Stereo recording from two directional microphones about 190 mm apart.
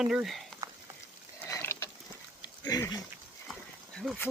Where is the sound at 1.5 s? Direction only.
15° left (ahead or behind).